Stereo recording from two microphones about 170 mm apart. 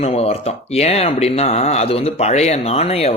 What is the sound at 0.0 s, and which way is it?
A man's voice, 35° left (ahead or behind).